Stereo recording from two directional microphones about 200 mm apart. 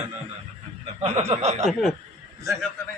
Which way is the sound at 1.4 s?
35° right (ahead or behind).